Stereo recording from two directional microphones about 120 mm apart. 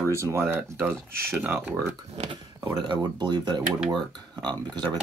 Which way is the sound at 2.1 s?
50° right (ahead or behind).